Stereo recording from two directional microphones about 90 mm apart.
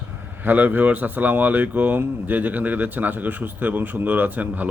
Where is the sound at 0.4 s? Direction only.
20° right (ahead or behind).